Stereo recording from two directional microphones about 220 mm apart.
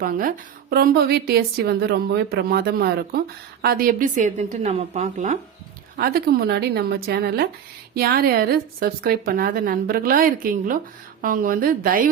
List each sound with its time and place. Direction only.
0.0 s a woman's voice: 40° right (ahead or behind)